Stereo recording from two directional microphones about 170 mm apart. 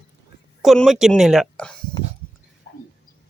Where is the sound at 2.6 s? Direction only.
75° left (ahead or behind).